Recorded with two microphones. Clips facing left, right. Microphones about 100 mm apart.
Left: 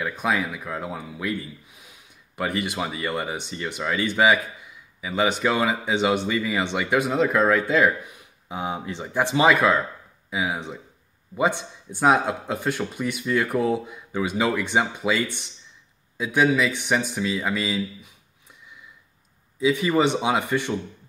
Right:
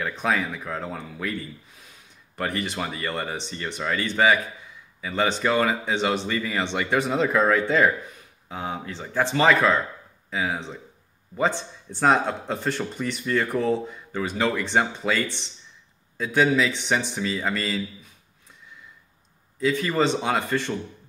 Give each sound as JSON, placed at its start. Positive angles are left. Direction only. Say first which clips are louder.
{"t": 0.0, "sound": "speech", "louder": "even", "side_deg": 5}
{"t": 19.6, "sound": "speech", "louder": "left 2 dB", "side_deg": 15}